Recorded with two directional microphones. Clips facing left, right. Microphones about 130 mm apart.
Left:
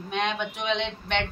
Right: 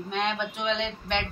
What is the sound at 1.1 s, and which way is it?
Speech, centre (ahead or behind).